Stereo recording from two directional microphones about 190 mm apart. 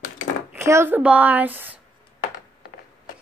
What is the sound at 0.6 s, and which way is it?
A woman's voice, 15° right (ahead or behind).